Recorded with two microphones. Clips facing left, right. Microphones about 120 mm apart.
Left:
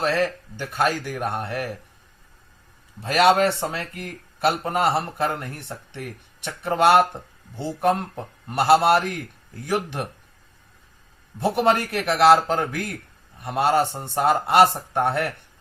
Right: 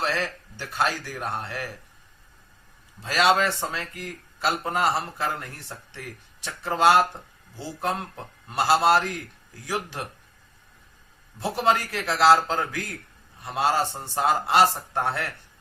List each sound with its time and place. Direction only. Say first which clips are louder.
0.0 s speech: left 5 dB; 50° left (ahead or behind)
3.0 s speech: left 4 dB; 55° left (ahead or behind)
8.4 s speech: left 4 dB; 60° left (ahead or behind)
11.3 s speech: left 3 dB; 60° left (ahead or behind)